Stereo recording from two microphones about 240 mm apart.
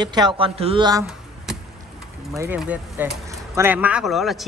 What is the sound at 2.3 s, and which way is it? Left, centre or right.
Speech, centre.